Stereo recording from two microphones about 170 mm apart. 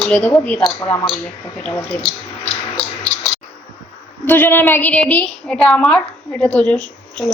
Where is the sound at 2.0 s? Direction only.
40° left (ahead or behind).